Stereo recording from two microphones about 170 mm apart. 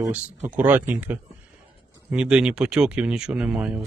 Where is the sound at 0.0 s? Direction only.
10° right (ahead or behind).